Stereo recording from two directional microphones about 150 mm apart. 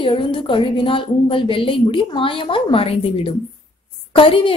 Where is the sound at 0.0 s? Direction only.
35° left (ahead or behind).